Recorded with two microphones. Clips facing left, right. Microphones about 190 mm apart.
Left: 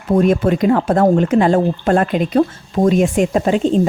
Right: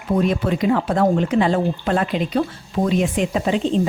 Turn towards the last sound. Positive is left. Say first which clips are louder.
# left 5 dB
turn(degrees=45)  # may be behind; listen again after turning